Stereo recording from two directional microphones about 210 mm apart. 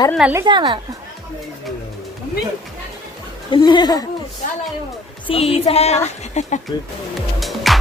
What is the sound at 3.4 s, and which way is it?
Speech, 20° left (ahead or behind).